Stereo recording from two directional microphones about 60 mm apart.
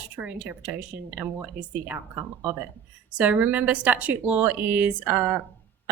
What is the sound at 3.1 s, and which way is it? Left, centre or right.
A woman's voice, right.